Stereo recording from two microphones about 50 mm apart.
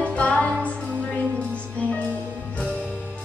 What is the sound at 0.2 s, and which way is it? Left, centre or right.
Music, left.